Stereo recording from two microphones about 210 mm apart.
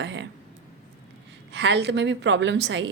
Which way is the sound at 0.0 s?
60° right (ahead or behind).